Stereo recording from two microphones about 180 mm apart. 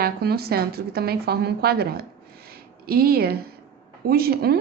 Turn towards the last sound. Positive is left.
turn(degrees=-60)  # may be behind; listen again after turning